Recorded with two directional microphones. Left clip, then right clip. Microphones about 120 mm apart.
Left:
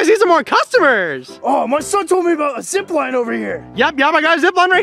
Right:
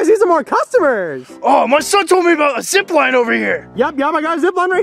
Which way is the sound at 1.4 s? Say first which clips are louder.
Right 5 dB; 20° right (ahead or behind).